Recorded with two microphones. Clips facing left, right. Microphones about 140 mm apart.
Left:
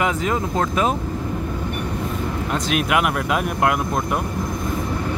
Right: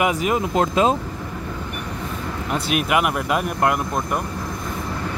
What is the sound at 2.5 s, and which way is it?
Speech, 5° right (ahead or behind).